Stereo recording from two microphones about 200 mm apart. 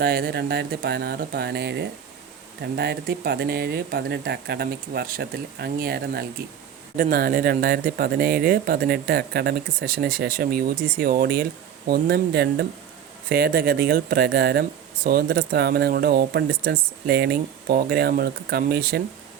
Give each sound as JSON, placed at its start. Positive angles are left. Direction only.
{"t": 0.0, "sound": "speech", "side_deg": -50}